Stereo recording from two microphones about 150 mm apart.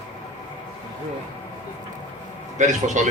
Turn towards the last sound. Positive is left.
turn(degrees=-55)  # may be behind; listen again after turning